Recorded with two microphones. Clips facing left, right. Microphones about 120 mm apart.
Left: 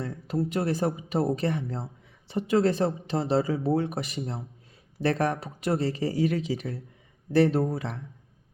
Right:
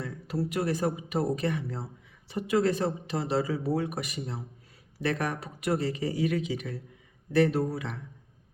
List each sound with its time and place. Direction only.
0.0 s speech: 30° left (ahead or behind)